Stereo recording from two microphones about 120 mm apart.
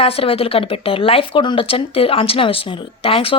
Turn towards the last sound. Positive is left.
turn(degrees=50)  # may be behind; listen again after turning